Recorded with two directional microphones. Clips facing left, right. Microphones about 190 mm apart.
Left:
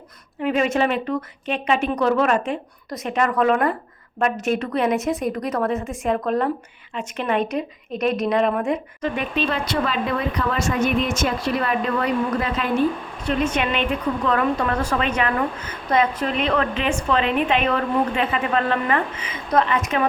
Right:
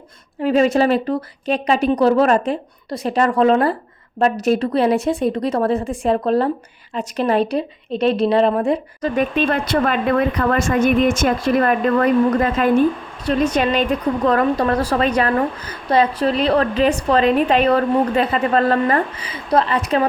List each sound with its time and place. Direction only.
0.4 s a woman's voice: 35° right (ahead or behind)
9.3 s speech: 55° right (ahead or behind)
13.2 s a woman's voice: 35° right (ahead or behind)